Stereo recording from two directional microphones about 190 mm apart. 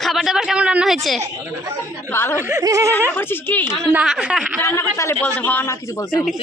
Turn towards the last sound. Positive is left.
turn(degrees=15)  # may be behind; listen again after turning